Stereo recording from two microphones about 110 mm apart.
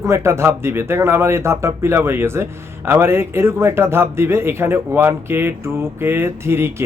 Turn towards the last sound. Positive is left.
turn(degrees=-20)  # may be behind; listen again after turning